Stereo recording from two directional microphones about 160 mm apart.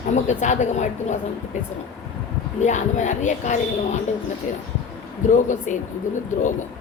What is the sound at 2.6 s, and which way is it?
Speech, 50° left (ahead or behind).